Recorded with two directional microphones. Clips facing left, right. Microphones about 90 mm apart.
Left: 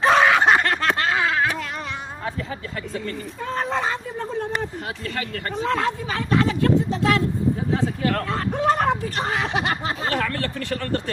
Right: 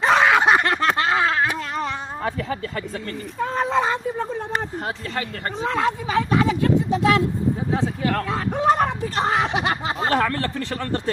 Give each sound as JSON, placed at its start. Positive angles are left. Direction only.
{"t": 0.1, "sound": "a sound", "side_deg": 0}
{"t": 2.2, "sound": "speech", "side_deg": -55}
{"t": 5.6, "sound": "speech", "side_deg": -15}
{"t": 8.5, "sound": "speech", "side_deg": -20}
{"t": 10.0, "sound": "speech", "side_deg": -30}